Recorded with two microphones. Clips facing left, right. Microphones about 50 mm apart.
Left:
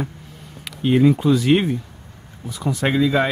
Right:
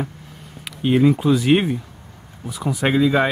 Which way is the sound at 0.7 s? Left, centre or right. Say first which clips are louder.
Even; centre.